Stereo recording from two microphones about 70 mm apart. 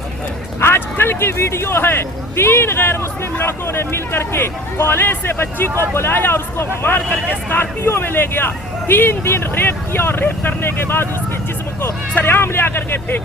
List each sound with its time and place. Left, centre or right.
0.6 s speech: left